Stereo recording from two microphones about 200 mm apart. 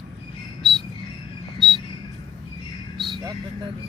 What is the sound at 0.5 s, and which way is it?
Bird, centre (ahead or behind).